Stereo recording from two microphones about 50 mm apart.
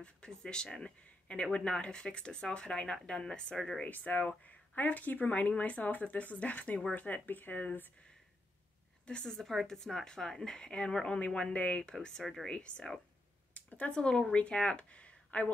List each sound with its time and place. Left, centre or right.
0.0 s speech: centre
3.8 s speech: left
9.0 s a woman's voice: centre
9.4 s speech: centre; by 11.9 s left
12.2 s speech: centre
12.4 s speech: left
13.6 s a sound: left
13.9 s speech: centre